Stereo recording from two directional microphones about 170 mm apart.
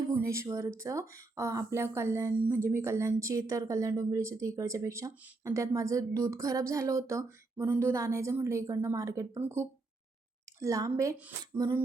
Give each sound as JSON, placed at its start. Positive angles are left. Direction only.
{"t": 0.1, "sound": "a woman's voice", "side_deg": -15}